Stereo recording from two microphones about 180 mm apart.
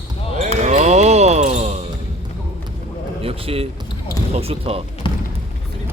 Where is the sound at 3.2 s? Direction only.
30° right (ahead or behind).